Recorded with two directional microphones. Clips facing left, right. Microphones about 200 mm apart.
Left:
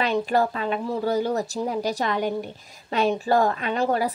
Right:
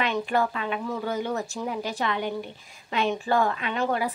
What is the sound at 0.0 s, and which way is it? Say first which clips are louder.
Speech: left 3 dB; 35° left (ahead or behind).